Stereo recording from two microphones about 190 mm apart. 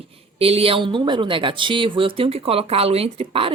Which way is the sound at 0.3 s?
30° right (ahead or behind).